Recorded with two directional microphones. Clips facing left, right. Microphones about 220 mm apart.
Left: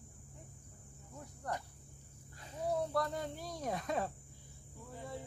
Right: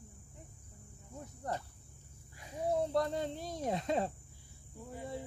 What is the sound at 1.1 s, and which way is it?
Cricket, 20° right (ahead or behind).